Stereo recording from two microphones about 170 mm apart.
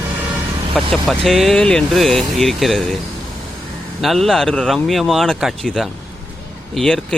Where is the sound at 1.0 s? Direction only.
Centre (ahead or behind).